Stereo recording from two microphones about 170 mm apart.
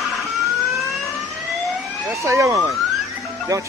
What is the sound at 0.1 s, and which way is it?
Guitar, centre (ahead or behind).